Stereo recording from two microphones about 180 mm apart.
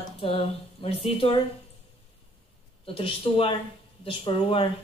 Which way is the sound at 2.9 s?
30° left (ahead or behind).